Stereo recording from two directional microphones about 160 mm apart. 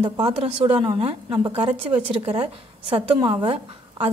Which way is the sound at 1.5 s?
45° right (ahead or behind).